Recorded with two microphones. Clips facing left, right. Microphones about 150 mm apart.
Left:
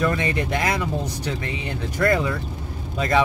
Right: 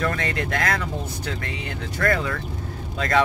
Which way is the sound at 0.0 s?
15° left (ahead or behind).